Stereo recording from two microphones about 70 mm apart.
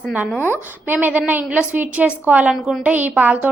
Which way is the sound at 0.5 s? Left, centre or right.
Right.